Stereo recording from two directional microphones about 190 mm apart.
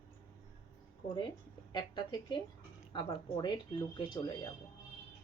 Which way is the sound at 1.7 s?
25° left (ahead or behind).